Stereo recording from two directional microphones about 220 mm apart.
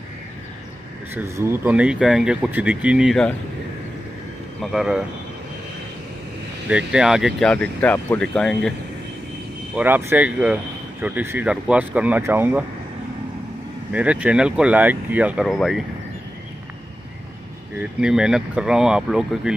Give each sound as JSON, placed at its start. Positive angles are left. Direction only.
{"t": 1.1, "sound": "speech", "side_deg": -10}
{"t": 4.6, "sound": "speech", "side_deg": 0}
{"t": 6.7, "sound": "speech", "side_deg": -5}
{"t": 9.8, "sound": "speech", "side_deg": -10}
{"t": 13.9, "sound": "speech", "side_deg": -5}
{"t": 18.0, "sound": "speech", "side_deg": -5}